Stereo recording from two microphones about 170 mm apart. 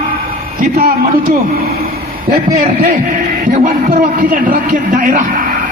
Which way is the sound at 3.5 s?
50° right (ahead or behind).